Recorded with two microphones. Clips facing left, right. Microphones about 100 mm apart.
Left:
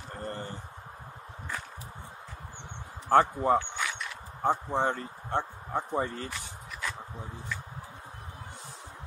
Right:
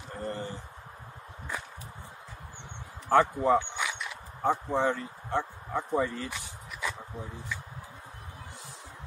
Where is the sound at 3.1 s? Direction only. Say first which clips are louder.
Even; 40° left (ahead or behind).